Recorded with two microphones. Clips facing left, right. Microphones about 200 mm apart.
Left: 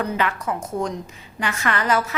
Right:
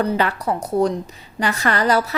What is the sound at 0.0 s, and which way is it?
A woman's voice, 35° right (ahead or behind).